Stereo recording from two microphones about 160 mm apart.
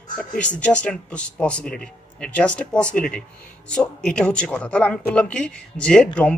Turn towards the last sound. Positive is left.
turn(degrees=5)  # may be behind; listen again after turning